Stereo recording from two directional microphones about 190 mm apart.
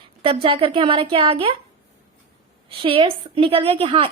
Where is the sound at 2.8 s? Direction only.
30° right (ahead or behind).